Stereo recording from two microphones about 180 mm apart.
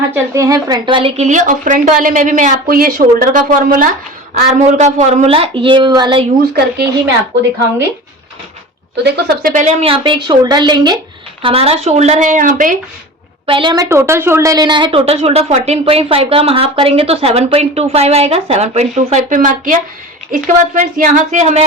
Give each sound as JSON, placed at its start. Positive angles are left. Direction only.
{"t": 0.1, "sound": "a woman's voice", "side_deg": -15}
{"t": 4.4, "sound": "a woman's voice", "side_deg": -40}
{"t": 9.0, "sound": "speech", "side_deg": -65}
{"t": 9.6, "sound": "a woman's voice", "side_deg": -35}
{"t": 13.5, "sound": "a woman's voice", "side_deg": -25}